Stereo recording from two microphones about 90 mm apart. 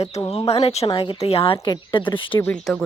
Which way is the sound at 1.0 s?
85° left.